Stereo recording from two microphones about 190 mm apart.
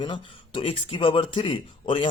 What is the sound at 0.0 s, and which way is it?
Speech, 25° left (ahead or behind).